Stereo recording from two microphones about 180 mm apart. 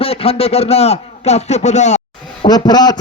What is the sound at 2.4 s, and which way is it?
Speech, 25° left (ahead or behind).